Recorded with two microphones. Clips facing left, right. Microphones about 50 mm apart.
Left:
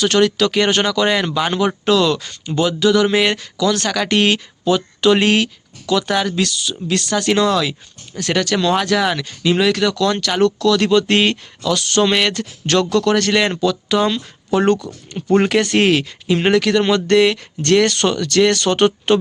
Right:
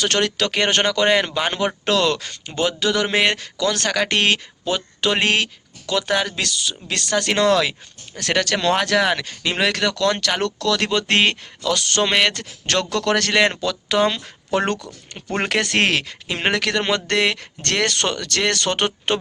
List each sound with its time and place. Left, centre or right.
0.0 s speech: right
13.6 s speech: right
15.4 s speech: right
16.3 s speech: right